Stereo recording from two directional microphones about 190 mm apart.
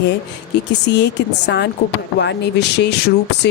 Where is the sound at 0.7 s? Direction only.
65° left (ahead or behind).